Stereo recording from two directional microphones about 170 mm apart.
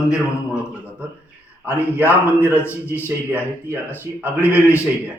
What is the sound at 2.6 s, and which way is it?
Speech, 15° left (ahead or behind).